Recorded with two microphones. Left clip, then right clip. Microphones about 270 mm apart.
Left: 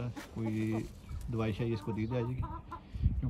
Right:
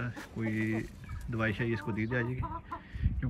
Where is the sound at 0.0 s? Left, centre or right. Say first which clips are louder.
Right 3 dB; centre.